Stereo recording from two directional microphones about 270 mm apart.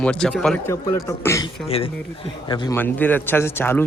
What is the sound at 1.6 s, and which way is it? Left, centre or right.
Speech, left.